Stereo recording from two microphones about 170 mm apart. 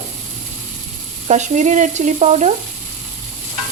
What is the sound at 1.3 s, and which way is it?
Speech, 45° right (ahead or behind).